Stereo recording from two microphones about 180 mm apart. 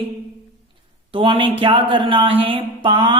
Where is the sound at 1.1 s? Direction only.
30° right (ahead or behind).